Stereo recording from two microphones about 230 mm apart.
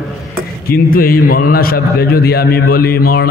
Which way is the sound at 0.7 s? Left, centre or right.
Left.